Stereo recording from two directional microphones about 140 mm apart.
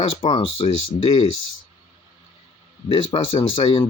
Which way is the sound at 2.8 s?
40° left (ahead or behind).